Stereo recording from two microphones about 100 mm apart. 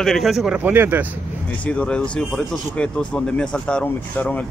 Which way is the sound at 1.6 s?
10° left (ahead or behind).